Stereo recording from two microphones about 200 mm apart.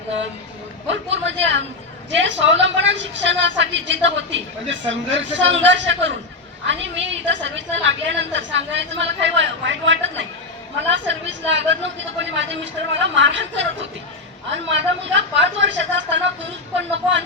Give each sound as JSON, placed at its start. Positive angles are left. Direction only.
{"t": 0.9, "sound": "a woman's voice", "side_deg": -65}